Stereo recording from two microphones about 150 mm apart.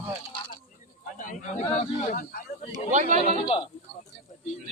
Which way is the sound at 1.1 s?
60° left (ahead or behind).